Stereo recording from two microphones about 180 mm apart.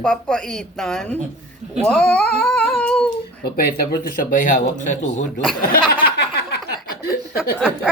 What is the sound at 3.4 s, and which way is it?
Speech, 60° left (ahead or behind).